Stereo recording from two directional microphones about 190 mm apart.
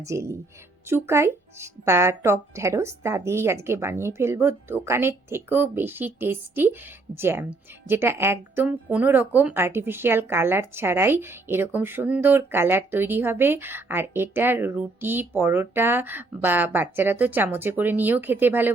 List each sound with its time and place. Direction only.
0.0 s speech: 15° right (ahead or behind)